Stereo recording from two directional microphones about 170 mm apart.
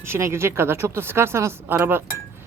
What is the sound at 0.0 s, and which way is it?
Speech, 15° right (ahead or behind).